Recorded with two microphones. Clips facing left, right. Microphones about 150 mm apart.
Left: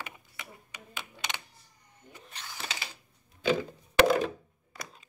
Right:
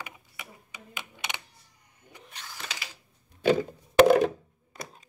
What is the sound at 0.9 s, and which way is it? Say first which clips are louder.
Typing: even; 15° right (ahead or behind).